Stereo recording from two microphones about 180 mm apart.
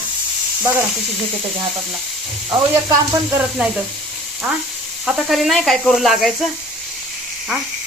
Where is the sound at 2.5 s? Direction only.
25° right (ahead or behind).